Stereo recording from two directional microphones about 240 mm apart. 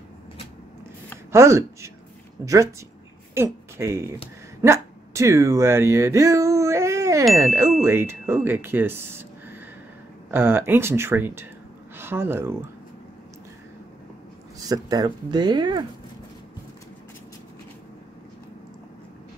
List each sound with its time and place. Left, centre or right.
1.3 s speech: centre
14.6 s speech: centre